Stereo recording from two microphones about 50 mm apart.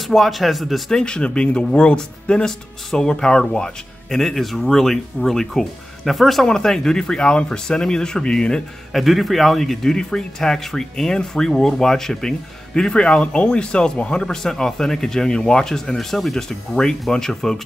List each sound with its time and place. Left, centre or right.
0.0 s speech: centre
0.9 s speech: centre
6.4 s speech: centre
8.9 s speech: centre